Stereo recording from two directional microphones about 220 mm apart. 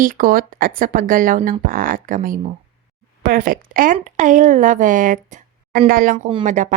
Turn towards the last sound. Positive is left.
turn(degrees=-35)  # may be behind; listen again after turning